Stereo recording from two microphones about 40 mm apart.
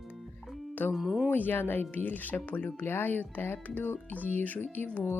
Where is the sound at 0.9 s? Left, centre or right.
Centre.